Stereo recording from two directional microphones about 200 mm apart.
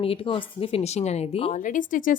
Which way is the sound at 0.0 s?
25° left (ahead or behind).